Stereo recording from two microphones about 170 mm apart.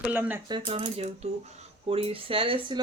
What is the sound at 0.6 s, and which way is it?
Speech, 40° right (ahead or behind).